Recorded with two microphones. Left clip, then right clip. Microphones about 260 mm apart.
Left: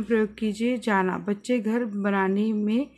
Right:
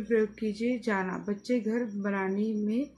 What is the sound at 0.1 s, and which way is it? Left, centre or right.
Speech, left.